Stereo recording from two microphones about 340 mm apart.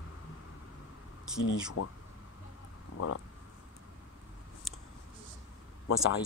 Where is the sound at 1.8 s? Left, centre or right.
Left.